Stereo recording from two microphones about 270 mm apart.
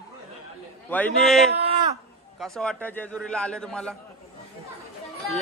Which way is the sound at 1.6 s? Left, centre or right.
Right.